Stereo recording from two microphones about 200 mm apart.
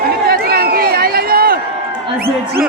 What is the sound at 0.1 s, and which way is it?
Chatter, 50° right (ahead or behind).